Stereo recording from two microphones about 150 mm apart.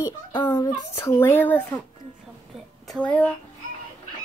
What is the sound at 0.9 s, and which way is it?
Speech, 15° left (ahead or behind).